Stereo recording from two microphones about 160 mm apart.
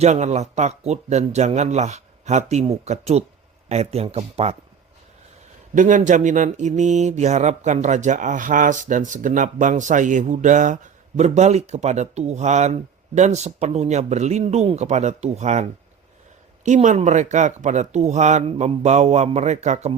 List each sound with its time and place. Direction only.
0.0 s speech: 45° right (ahead or behind)
5.7 s speech: 50° right (ahead or behind)